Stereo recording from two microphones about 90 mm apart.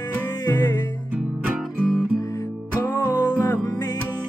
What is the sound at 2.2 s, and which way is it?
Music, 40° left (ahead or behind).